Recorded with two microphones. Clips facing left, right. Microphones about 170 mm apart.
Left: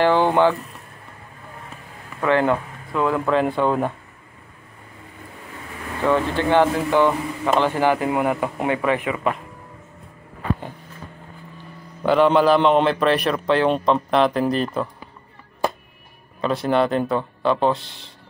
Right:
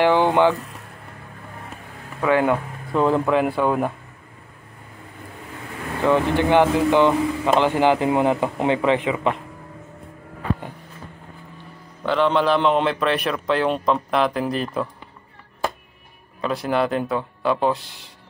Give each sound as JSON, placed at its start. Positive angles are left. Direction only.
{"t": 0.0, "sound": "speech", "side_deg": -15}
{"t": 2.2, "sound": "speech", "side_deg": -10}
{"t": 2.9, "sound": "speech", "side_deg": -25}
{"t": 3.3, "sound": "speech", "side_deg": -10}
{"t": 6.0, "sound": "speech", "side_deg": -15}
{"t": 12.1, "sound": "a man's voice", "side_deg": 5}
{"t": 16.3, "sound": "a man's voice", "side_deg": -5}